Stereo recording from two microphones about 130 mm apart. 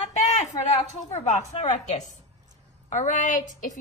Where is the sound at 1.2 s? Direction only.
60° left (ahead or behind).